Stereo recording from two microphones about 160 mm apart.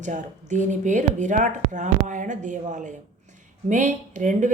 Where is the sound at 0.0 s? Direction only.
50° right (ahead or behind).